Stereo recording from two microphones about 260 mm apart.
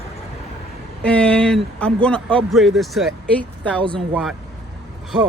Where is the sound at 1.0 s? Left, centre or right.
Centre.